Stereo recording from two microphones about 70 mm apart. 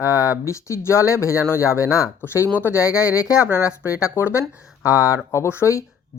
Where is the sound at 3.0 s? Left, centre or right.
Centre.